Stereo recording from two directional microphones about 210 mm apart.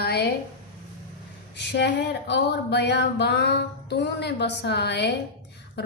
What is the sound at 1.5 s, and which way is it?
Speech, 55° left (ahead or behind).